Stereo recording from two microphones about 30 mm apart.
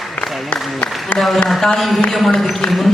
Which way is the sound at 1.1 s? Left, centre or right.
Centre.